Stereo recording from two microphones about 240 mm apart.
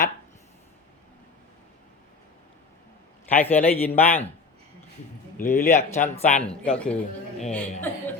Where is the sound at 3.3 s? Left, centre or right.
Centre.